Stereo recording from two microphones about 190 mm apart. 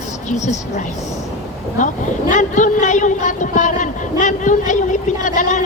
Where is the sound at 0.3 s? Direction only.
40° left (ahead or behind).